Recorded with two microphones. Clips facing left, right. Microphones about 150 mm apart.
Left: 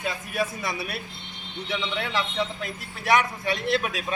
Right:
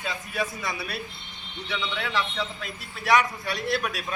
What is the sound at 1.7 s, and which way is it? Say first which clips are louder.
A man's voice: left 1 dB; 25° left (ahead or behind).